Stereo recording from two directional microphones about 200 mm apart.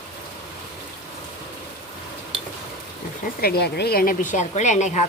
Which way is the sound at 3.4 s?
50° left (ahead or behind).